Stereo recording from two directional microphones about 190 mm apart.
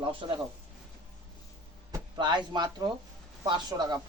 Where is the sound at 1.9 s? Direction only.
25° right (ahead or behind).